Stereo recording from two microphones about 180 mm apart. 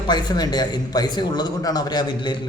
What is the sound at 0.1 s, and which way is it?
A man's voice, 25° left (ahead or behind).